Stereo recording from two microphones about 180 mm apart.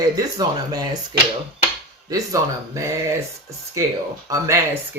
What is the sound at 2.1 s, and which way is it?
Speech, 20° right (ahead or behind).